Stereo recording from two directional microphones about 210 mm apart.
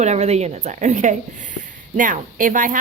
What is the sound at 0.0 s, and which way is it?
A woman's voice, 30° right (ahead or behind).